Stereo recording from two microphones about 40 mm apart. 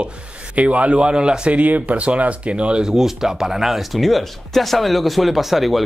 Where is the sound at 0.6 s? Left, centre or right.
Right.